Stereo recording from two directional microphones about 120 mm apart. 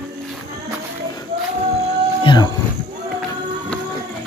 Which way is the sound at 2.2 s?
35° left (ahead or behind).